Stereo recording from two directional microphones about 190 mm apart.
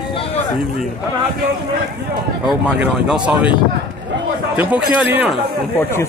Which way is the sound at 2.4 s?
Centre (ahead or behind).